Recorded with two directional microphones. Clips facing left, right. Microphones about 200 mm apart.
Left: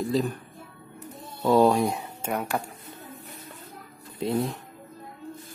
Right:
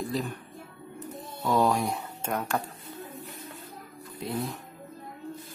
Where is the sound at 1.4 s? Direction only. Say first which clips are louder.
Left 5 dB; 30° left (ahead or behind).